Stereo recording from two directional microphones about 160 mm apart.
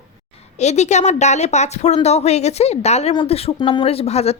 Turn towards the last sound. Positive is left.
turn(degrees=40)  # may be behind; listen again after turning